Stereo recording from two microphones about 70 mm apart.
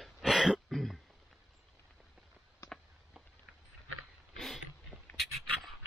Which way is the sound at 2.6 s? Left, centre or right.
Left.